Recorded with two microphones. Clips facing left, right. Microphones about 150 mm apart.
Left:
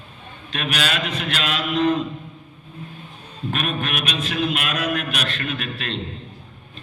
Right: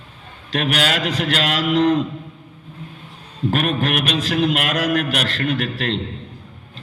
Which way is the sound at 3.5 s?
75° right (ahead or behind).